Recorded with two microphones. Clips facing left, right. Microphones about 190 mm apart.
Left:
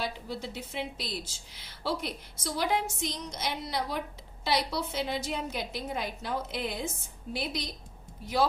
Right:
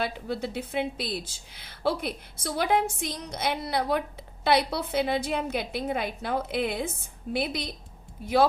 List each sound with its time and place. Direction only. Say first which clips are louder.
0.0 s a woman's voice: right 5 dB; 60° right (ahead or behind)